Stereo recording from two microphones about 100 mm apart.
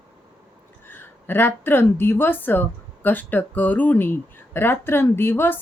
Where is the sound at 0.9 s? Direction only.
20° left (ahead or behind).